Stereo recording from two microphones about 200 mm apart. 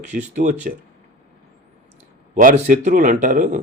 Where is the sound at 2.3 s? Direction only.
40° right (ahead or behind).